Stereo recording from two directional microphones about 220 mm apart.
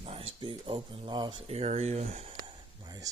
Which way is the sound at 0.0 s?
25° right (ahead or behind).